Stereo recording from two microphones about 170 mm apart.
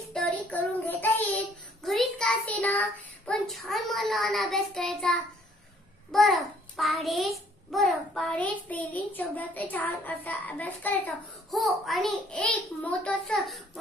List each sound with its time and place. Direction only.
0.1 s child singing: 5° left (ahead or behind)
6.1 s a child's voice: centre (ahead or behind)